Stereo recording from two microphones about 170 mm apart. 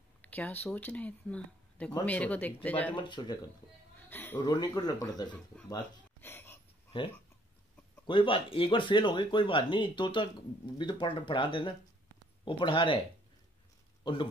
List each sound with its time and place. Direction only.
0.2 s a sound: 10° left (ahead or behind)
0.7 s speech: 10° left (ahead or behind)
2.9 s speech: 30° left (ahead or behind)
4.1 s a man's voice: 10° left (ahead or behind)
4.6 s speech: 25° left (ahead or behind)
6.2 s a sound: 15° left (ahead or behind)
8.1 s speech: 30° left (ahead or behind)
14.0 s speech: 30° left (ahead or behind)